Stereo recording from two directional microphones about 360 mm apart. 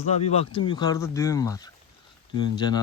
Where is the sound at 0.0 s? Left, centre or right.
Centre.